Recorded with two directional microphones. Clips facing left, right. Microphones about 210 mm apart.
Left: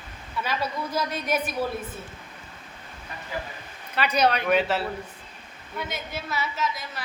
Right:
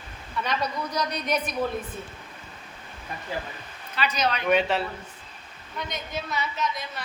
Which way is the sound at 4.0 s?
60° left (ahead or behind).